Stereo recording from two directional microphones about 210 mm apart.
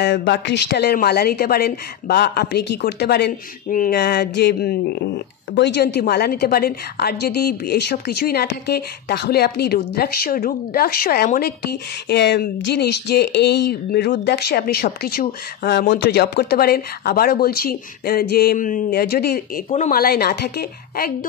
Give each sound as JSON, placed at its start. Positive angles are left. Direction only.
{"t": 0.0, "sound": "a woman's voice", "side_deg": 55}